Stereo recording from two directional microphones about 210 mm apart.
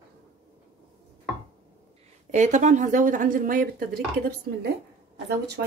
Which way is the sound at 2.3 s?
35° right (ahead or behind).